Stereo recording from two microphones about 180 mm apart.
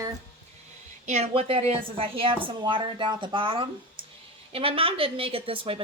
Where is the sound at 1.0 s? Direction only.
40° right (ahead or behind).